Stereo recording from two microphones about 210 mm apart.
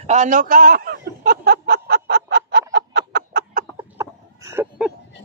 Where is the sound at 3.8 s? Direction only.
15° right (ahead or behind).